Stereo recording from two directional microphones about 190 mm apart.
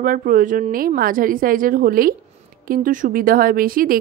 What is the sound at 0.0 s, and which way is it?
Speech, 45° right (ahead or behind).